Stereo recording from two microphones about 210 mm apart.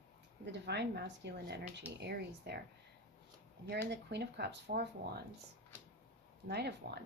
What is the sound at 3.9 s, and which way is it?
Speech, 55° right (ahead or behind).